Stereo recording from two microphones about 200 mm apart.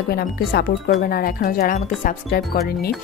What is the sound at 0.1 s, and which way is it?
A woman's voice, 50° left (ahead or behind).